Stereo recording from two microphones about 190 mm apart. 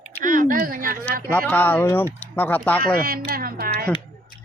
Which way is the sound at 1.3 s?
10° left (ahead or behind).